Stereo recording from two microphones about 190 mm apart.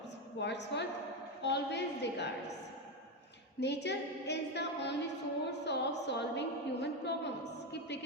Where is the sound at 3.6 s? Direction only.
65° left (ahead or behind).